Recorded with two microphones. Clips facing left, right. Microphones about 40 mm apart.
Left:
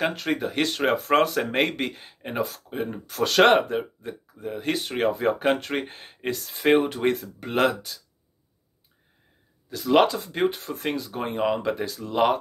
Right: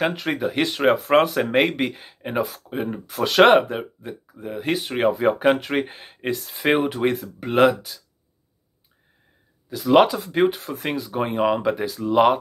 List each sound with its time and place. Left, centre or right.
0.0 s speech: centre
9.7 s speech: right
11.7 s speech: right